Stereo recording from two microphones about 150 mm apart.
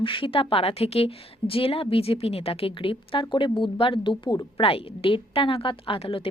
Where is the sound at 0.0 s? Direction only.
35° left (ahead or behind).